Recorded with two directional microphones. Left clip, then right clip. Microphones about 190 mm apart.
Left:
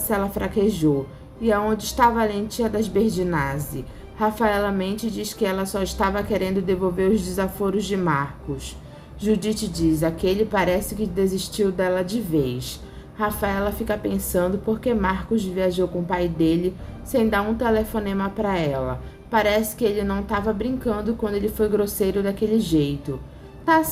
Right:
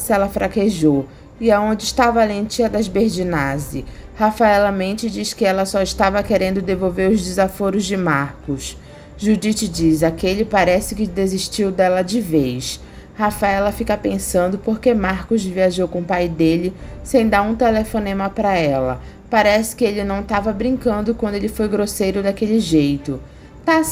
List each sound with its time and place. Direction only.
0.1 s a woman's voice: 30° right (ahead or behind)